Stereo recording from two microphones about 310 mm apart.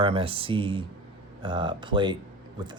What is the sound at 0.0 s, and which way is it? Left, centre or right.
Speech, centre.